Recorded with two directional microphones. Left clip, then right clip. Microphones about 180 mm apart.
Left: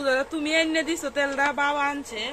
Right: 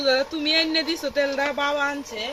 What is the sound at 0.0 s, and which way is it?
Speech, 15° right (ahead or behind).